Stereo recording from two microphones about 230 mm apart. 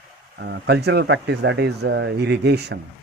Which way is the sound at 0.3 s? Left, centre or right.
Right.